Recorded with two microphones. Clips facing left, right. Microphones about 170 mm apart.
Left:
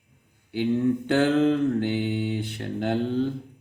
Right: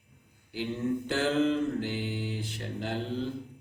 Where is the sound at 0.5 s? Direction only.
60° left (ahead or behind).